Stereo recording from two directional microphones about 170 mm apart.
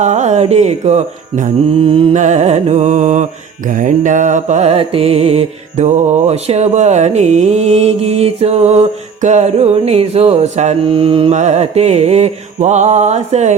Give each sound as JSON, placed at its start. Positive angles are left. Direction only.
{"t": 0.0, "sound": "mantra", "side_deg": -45}
{"t": 2.1, "sound": "music", "side_deg": -45}
{"t": 3.7, "sound": "mantra", "side_deg": -50}